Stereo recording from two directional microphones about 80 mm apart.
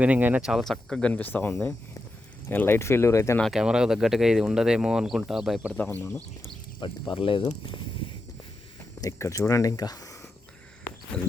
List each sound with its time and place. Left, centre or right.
0.0 s speech: centre
0.4 s speech: centre
1.1 s speech: left
3.5 s speech: centre
5.7 s speech: centre
7.1 s speech: left
9.0 s speech: left
11.1 s speech: centre